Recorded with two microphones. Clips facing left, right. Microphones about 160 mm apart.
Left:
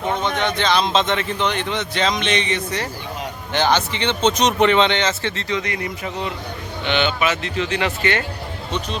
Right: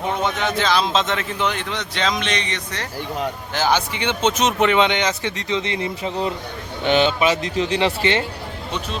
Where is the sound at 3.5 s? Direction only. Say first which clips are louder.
Left 2 dB; 10° right (ahead or behind); by 8.2 s 25° right (ahead or behind).